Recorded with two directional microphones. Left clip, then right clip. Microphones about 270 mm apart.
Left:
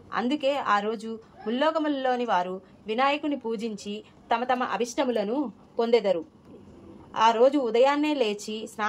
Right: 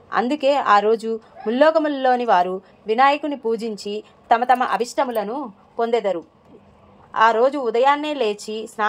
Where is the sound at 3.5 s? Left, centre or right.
Right.